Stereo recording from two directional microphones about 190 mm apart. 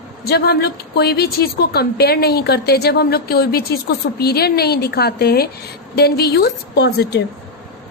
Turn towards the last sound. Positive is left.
turn(degrees=60)  # may be behind; listen again after turning